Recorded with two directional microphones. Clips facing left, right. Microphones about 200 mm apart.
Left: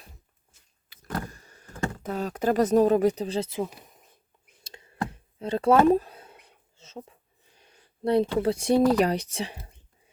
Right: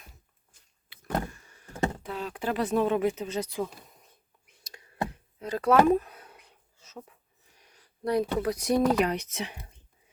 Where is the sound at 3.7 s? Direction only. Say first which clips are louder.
Left 1 dB; 20° left (ahead or behind).